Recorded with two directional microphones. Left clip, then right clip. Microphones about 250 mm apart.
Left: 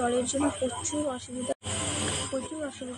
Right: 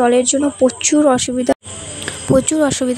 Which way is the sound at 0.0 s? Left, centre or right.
Right.